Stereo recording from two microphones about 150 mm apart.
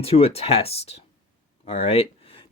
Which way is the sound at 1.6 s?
45° left (ahead or behind).